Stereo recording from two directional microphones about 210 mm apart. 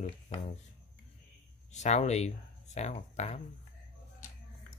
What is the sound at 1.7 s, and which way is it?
Speech, 35° left (ahead or behind).